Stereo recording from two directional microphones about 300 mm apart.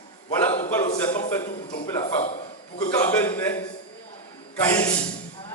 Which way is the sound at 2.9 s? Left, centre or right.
Centre.